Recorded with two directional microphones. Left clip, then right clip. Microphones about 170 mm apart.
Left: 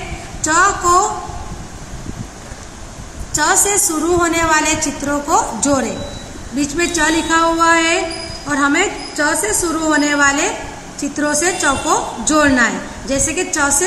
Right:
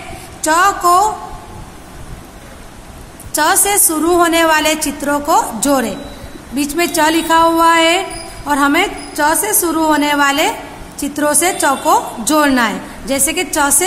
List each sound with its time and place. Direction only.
0.4 s a woman's voice: 70° right (ahead or behind)
3.3 s a woman's voice: 65° right (ahead or behind)